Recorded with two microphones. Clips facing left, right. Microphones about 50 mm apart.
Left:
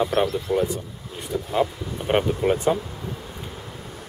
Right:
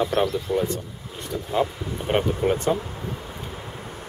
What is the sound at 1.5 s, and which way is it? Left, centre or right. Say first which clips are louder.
Speech: even; centre.